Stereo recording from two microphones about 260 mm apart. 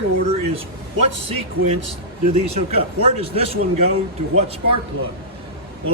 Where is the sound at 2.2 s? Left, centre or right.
Right.